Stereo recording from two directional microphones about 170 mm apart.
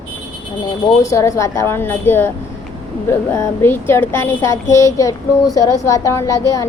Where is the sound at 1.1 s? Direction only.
20° left (ahead or behind).